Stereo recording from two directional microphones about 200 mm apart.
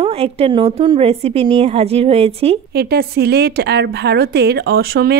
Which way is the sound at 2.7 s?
50° right (ahead or behind).